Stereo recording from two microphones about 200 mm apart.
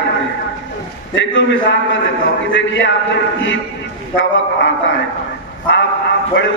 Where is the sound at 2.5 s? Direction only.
70° left (ahead or behind).